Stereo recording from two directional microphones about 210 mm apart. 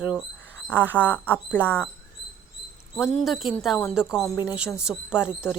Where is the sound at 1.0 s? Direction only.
5° left (ahead or behind).